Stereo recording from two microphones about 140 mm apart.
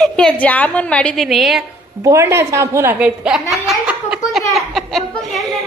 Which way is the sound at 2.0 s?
20° right (ahead or behind).